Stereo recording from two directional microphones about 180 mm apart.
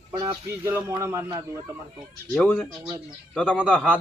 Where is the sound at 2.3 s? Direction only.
10° left (ahead or behind).